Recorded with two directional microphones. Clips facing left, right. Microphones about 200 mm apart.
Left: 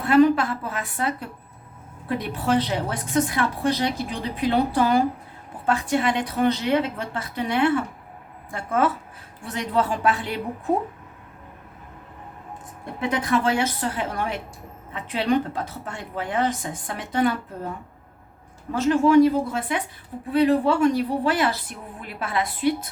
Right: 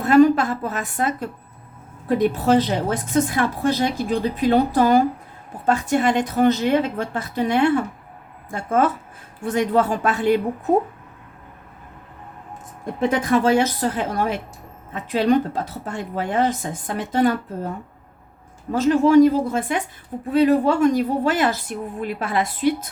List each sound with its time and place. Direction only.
0.0 s a woman's voice: 45° right (ahead or behind)
12.8 s a woman's voice: 45° right (ahead or behind)
18.7 s a woman's voice: 40° right (ahead or behind)